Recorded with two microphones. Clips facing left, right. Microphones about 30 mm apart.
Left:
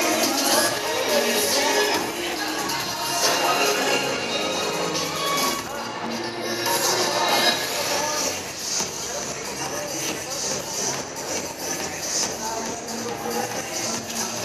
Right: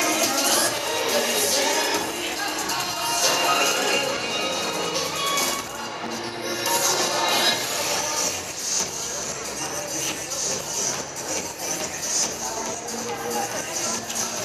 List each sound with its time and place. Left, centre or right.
0.0 s music: left
3.1 s music: centre
3.6 s a sound: centre
4.4 s music: centre
6.6 s music: centre